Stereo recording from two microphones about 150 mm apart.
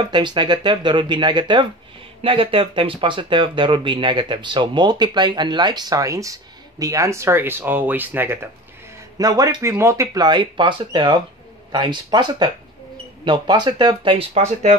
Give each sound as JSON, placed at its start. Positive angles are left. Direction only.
{"t": 0.1, "sound": "speech", "side_deg": -30}
{"t": 9.2, "sound": "speech", "side_deg": -25}